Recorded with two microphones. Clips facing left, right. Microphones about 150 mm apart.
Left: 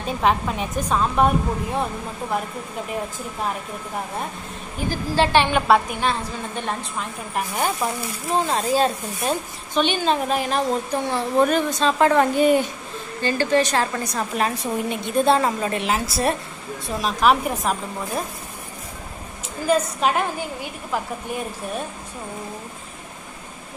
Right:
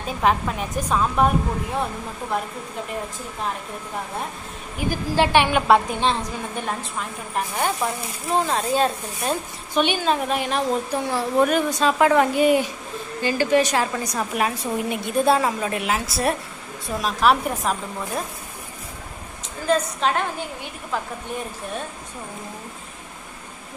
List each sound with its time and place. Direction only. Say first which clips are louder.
0.0 s speech: even; centre (ahead or behind)
4.7 s a woman's voice: even; 15° right (ahead or behind)
5.9 s a woman's voice: right 1 dB; 25° right (ahead or behind)
6.6 s speech: left 1 dB; centre (ahead or behind)
9.8 s a woman's voice: even; 10° right (ahead or behind)
10.1 s a woman's voice: left 1 dB; centre (ahead or behind)
19.6 s a woman's voice: left 1 dB; 10° left (ahead or behind)